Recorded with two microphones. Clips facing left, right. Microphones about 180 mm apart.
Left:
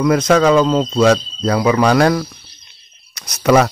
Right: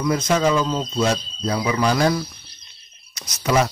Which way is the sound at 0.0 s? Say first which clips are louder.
Left 7 dB; 75° left (ahead or behind).